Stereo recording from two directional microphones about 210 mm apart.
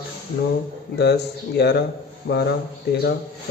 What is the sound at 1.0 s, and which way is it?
Speech, 50° left (ahead or behind).